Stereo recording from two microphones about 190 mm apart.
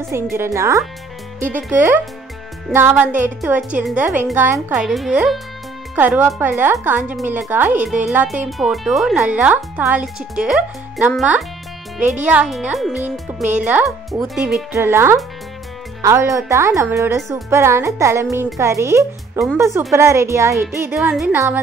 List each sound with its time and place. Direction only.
0.1 s a woman's voice: 15° right (ahead or behind)
13.4 s speech: 40° right (ahead or behind)
13.7 s a woman's voice: 5° right (ahead or behind)
14.7 s a woman's voice: 10° right (ahead or behind)
20.9 s speech: centre (ahead or behind)